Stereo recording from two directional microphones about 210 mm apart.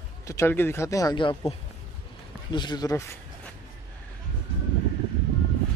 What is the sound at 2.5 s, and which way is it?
Speech, 20° left (ahead or behind).